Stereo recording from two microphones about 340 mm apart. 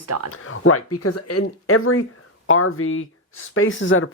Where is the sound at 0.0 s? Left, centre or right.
Right.